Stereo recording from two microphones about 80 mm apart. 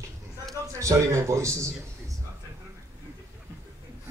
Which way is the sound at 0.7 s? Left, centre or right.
Right.